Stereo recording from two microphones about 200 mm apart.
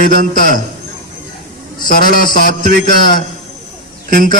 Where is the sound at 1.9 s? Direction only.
45° left (ahead or behind).